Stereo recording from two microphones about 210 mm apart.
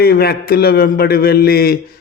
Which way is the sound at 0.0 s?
45° left (ahead or behind).